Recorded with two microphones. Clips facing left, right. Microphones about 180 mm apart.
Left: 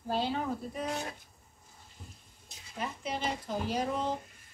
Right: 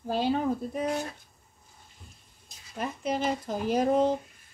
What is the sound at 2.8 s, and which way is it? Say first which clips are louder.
Speech: right 6 dB; 50° right (ahead or behind).